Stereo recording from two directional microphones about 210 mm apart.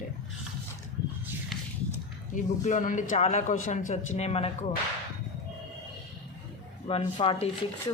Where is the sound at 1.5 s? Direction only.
Centre (ahead or behind).